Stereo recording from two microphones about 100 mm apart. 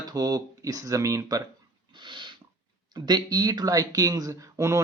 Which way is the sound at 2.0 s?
50° right (ahead or behind).